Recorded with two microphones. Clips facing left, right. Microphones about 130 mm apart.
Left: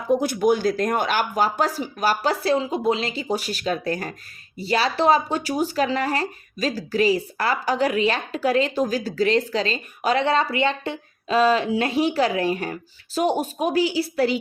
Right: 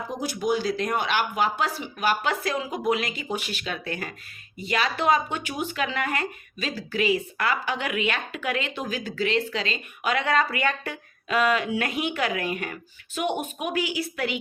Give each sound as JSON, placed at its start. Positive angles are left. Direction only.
{"t": 0.1, "sound": "speech", "side_deg": 55}